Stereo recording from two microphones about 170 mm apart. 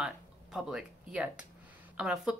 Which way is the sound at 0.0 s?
5° right (ahead or behind).